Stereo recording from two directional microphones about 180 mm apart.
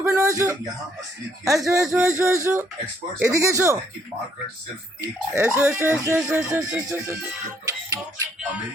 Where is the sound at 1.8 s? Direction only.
5° right (ahead or behind).